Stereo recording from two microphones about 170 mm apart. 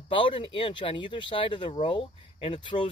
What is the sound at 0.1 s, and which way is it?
Speech, 30° left (ahead or behind).